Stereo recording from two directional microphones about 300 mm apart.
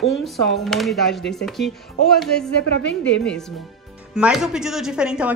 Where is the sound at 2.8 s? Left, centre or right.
Left.